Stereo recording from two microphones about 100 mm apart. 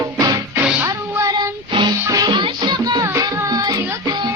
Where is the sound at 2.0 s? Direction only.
40° right (ahead or behind).